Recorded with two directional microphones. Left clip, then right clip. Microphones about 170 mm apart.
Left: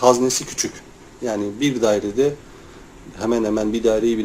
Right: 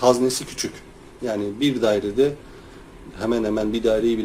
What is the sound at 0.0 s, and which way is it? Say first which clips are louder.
Speech: left 2 dB; centre (ahead or behind).